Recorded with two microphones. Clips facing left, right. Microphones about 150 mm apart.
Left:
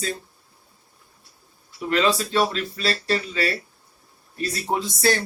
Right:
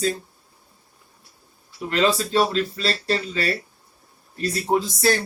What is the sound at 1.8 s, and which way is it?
A man's voice, 35° right (ahead or behind).